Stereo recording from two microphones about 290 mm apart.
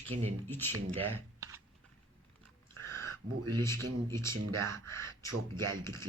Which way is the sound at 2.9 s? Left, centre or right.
Centre.